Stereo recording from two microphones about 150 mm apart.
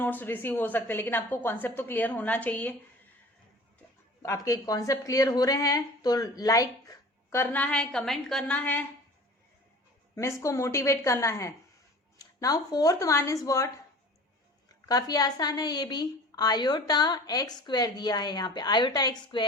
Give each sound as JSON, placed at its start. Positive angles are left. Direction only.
{"t": 0.0, "sound": "a woman's voice", "side_deg": 10}
{"t": 4.2, "sound": "speech", "side_deg": 20}
{"t": 10.2, "sound": "speech", "side_deg": 20}
{"t": 14.8, "sound": "speech", "side_deg": 25}